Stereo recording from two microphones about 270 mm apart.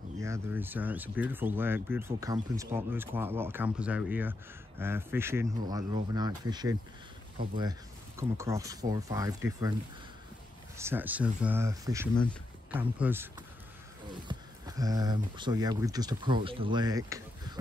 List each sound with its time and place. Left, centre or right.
0.2 s speech: centre
8.2 s speech: centre
10.8 s speech: centre